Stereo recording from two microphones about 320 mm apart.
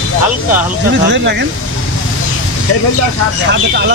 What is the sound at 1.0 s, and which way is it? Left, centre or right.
Speech, right.